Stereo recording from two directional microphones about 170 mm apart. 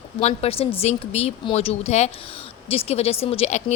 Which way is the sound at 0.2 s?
40° left (ahead or behind).